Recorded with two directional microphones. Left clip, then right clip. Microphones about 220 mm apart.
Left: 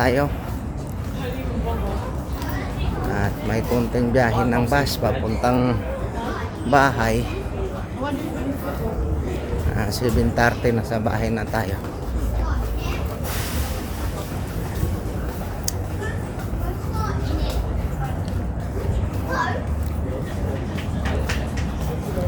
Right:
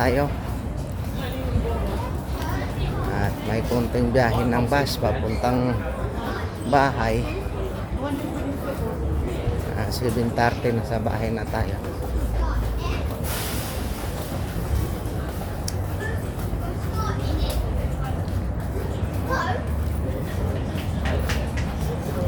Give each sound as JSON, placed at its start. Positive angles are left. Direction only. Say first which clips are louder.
{"t": 0.0, "sound": "speech", "louder": "left 2 dB", "side_deg": 15}
{"t": 3.2, "sound": "speech", "louder": "left 1 dB", "side_deg": 10}
{"t": 9.7, "sound": "speech", "louder": "left 4 dB", "side_deg": 15}